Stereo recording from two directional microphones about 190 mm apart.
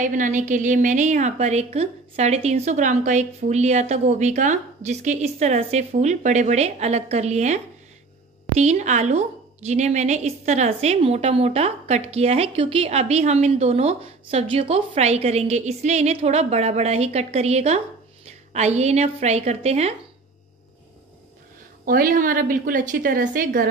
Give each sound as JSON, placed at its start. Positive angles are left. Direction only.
{"t": 0.0, "sound": "a woman's voice", "side_deg": -40}
{"t": 21.8, "sound": "a woman's voice", "side_deg": -50}